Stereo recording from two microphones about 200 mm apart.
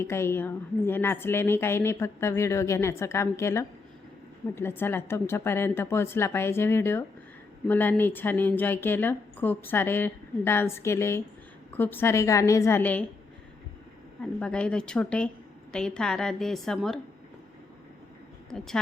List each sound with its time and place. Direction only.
0.0 s a woman's voice: 15° left (ahead or behind)
14.3 s a woman's voice: 5° left (ahead or behind)